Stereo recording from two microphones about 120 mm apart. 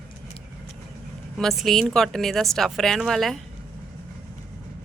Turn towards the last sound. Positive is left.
turn(degrees=0)  # may be behind; listen again after turning